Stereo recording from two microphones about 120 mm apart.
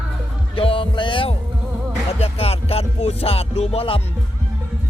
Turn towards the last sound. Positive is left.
turn(degrees=55)  # may be behind; listen again after turning